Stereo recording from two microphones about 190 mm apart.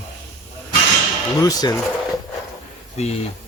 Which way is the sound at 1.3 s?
20° left (ahead or behind).